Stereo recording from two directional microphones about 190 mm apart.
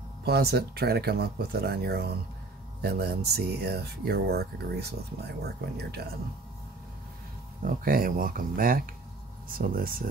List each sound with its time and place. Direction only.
0.2 s speech: 55° right (ahead or behind)
7.6 s speech: 50° right (ahead or behind)